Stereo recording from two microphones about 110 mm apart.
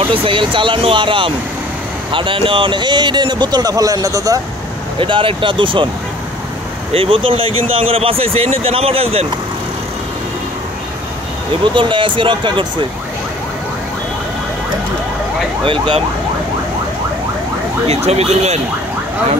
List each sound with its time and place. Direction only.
0.1 s speech: 50° right (ahead or behind); by 4.4 s 30° right (ahead or behind)
4.9 s speech: 50° right (ahead or behind)
6.9 s speech: 55° right (ahead or behind)
11.6 s speech: 50° right (ahead or behind)
15.6 s speech: 50° right (ahead or behind)
17.8 s speech: 75° right (ahead or behind)